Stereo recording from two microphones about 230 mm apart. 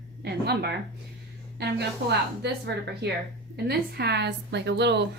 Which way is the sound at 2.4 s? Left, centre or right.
Right.